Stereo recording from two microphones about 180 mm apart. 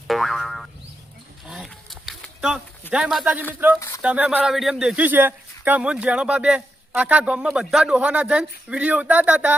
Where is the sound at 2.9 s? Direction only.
5° right (ahead or behind).